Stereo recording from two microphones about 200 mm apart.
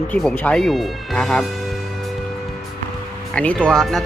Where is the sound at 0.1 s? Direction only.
5° left (ahead or behind).